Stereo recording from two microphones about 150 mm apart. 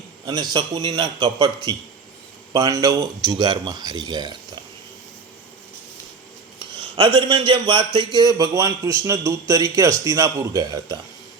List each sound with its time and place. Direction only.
0.3 s a man's voice: 30° right (ahead or behind)
6.6 s a man's voice: 30° right (ahead or behind)